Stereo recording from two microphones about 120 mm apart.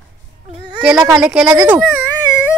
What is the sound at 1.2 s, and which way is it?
Speech, 5° right (ahead or behind).